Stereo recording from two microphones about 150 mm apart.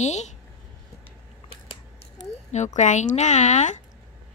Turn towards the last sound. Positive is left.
turn(degrees=55)  # may be behind; listen again after turning